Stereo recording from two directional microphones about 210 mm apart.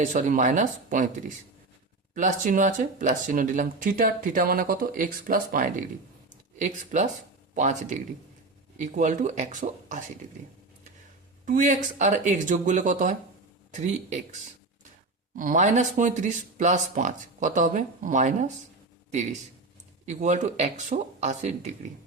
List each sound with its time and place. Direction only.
0.0 s speech: 40° right (ahead or behind)
2.1 s speech: 35° right (ahead or behind)
11.4 s speech: 35° right (ahead or behind)